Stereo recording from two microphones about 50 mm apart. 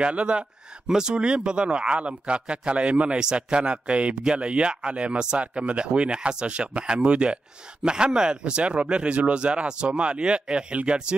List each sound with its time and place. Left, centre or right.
0.0 s speech: right